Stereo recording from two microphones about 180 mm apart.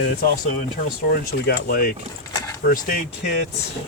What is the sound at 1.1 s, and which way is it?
Speech, 55° left (ahead or behind).